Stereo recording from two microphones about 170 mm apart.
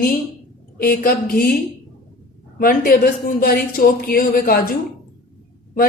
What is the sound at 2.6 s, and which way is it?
Speech, 60° left (ahead or behind).